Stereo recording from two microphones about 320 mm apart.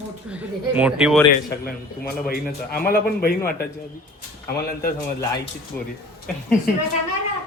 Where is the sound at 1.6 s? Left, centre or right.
Left.